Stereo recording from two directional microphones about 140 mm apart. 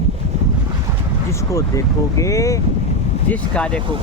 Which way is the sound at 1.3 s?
20° left (ahead or behind).